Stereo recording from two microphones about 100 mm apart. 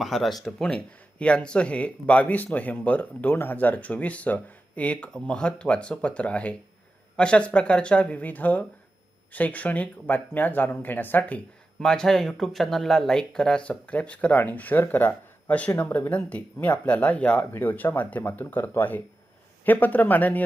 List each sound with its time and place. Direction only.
0.0 s speech: centre (ahead or behind); by 11.3 s 15° left (ahead or behind)
11.8 s speech: 5° left (ahead or behind)